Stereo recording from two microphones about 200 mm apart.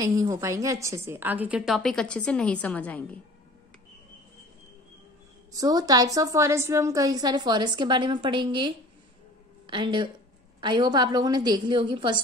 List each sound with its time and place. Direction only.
0.0 s a woman's voice: 15° right (ahead or behind); by 3.2 s 5° left (ahead or behind)
5.6 s a woman's voice: 20° right (ahead or behind)